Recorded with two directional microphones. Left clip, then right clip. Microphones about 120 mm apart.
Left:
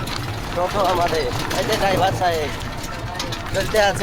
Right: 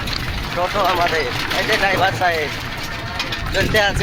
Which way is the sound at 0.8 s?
60° right (ahead or behind).